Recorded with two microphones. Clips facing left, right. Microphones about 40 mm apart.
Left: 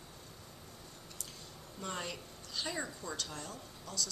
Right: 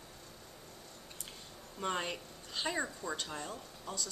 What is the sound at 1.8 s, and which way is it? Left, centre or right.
A woman's voice, right.